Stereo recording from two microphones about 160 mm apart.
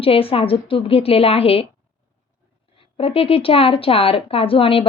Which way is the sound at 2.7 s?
35° left (ahead or behind).